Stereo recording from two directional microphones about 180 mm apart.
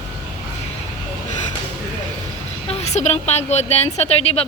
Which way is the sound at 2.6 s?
35° left (ahead or behind).